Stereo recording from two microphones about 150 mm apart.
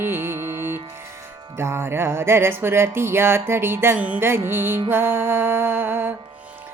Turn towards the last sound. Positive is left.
turn(degrees=-15)  # may be behind; listen again after turning